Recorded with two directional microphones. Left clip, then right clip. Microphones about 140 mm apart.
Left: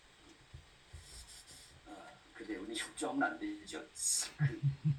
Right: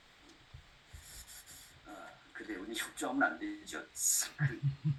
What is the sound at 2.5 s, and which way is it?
Speech, 40° right (ahead or behind).